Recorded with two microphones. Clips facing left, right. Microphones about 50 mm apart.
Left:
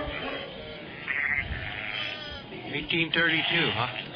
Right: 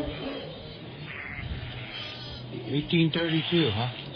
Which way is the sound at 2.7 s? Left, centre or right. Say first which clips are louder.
Right 1 dB; left.